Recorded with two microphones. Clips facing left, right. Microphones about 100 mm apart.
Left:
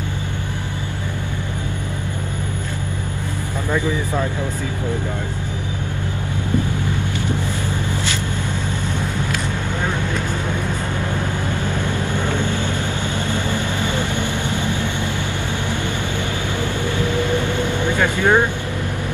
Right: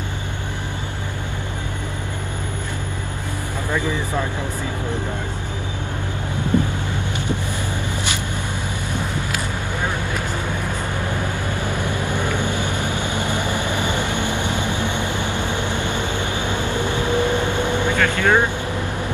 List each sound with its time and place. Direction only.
11.8 s vehicle: 15° right (ahead or behind)
16.6 s vehicle: 20° right (ahead or behind)
17.9 s vehicle: 15° left (ahead or behind)